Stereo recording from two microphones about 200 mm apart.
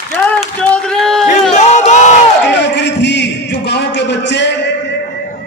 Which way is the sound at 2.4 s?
60° left (ahead or behind).